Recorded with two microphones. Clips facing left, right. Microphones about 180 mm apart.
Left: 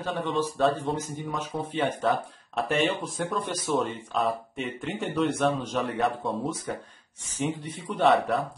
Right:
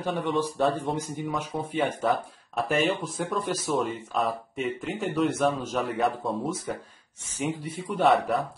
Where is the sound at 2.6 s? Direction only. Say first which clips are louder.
Right 1 dB; centre (ahead or behind).